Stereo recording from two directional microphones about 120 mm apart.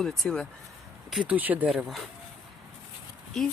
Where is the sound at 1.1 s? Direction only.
10° right (ahead or behind).